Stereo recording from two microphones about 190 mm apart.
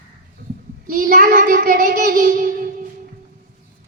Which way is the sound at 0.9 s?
45° right (ahead or behind).